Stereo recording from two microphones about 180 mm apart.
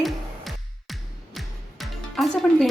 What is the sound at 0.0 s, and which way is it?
Music, centre (ahead or behind).